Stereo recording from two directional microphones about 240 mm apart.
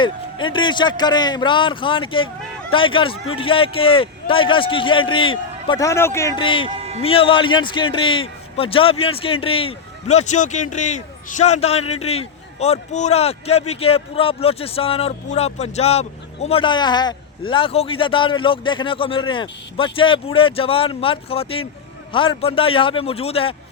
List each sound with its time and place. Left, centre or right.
0.0 s a man's voice: centre
6.7 s a sound: right
7.0 s a man's voice: left